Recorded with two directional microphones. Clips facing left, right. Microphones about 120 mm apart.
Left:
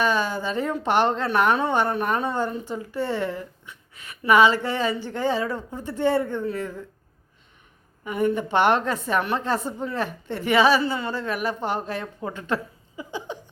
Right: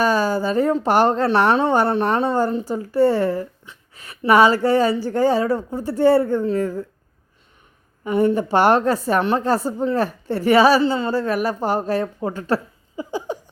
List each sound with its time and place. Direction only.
0.0 s a woman's voice: 40° right (ahead or behind)
8.0 s a woman's voice: 35° right (ahead or behind)
13.0 s a sound: 40° right (ahead or behind)